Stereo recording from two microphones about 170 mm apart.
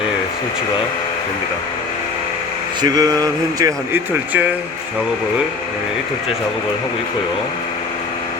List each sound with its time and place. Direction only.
2.8 s speech: 20° right (ahead or behind)